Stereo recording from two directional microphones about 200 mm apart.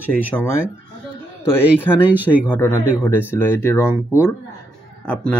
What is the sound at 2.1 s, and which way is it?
Speech, 10° right (ahead or behind).